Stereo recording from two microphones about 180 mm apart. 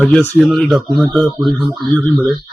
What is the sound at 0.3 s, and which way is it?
Speech, centre (ahead or behind).